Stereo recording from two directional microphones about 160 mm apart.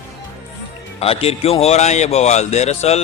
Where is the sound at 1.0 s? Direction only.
35° left (ahead or behind).